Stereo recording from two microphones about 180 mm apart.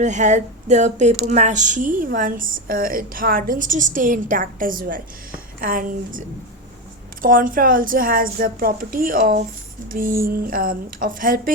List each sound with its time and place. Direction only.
0.0 s speech: 40° right (ahead or behind)